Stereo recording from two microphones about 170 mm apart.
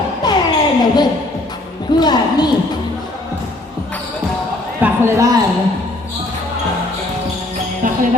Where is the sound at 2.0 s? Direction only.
25° left (ahead or behind).